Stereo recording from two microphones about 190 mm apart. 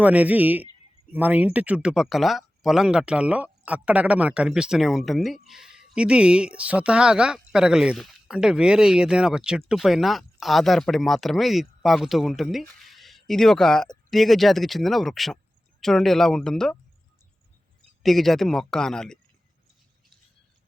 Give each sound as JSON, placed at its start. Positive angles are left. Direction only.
{"t": 0.0, "sound": "speech", "side_deg": -5}
{"t": 18.0, "sound": "speech", "side_deg": 0}